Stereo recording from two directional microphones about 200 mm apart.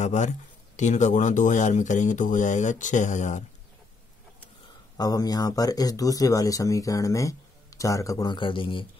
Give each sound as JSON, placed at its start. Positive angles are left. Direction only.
{"t": 0.0, "sound": "speech", "side_deg": 35}
{"t": 4.9, "sound": "speech", "side_deg": 20}